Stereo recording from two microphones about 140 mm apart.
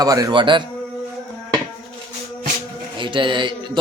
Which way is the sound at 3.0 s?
35° right (ahead or behind).